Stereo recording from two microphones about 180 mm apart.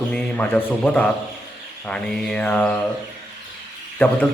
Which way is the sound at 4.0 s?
10° left (ahead or behind).